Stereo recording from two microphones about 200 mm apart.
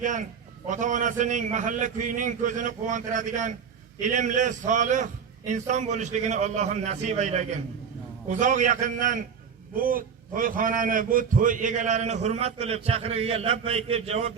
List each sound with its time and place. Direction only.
0.0 s a man's voice: 40° right (ahead or behind)